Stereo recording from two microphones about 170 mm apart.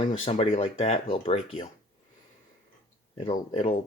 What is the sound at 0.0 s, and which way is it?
Speech, 35° left (ahead or behind).